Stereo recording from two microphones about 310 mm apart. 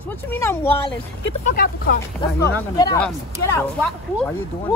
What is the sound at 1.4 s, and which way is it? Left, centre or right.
Speech, left.